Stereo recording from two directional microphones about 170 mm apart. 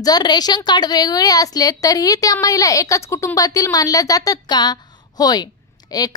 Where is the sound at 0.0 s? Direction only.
25° left (ahead or behind).